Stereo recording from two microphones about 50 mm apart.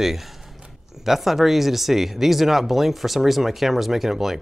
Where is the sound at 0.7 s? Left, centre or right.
Centre.